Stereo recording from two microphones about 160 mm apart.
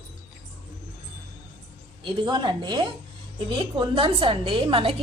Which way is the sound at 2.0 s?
30° right (ahead or behind).